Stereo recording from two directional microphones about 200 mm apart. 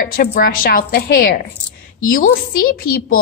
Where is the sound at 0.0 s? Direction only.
45° left (ahead or behind).